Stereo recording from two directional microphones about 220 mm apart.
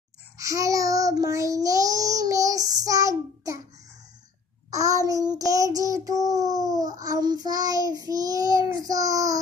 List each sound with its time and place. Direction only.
0.4 s child singing: 15° right (ahead or behind)
4.6 s child singing: 15° right (ahead or behind)